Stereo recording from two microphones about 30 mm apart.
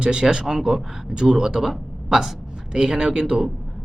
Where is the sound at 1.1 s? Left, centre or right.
Right.